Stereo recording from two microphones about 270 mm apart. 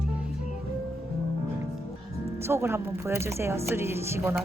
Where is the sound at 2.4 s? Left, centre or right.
Centre.